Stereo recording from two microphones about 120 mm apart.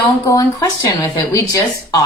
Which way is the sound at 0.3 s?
30° left (ahead or behind).